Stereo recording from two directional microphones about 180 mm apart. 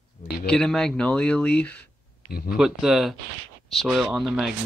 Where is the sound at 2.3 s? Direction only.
55° left (ahead or behind).